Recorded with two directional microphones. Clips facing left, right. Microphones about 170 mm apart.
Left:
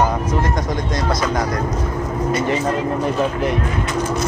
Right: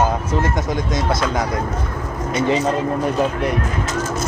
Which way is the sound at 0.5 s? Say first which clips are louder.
Even; centre (ahead or behind).